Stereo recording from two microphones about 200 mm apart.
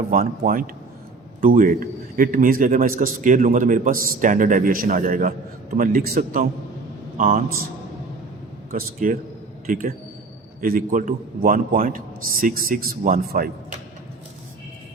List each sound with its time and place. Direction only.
0.1 s a man's voice: 45° right (ahead or behind)
8.7 s a man's voice: 45° right (ahead or behind)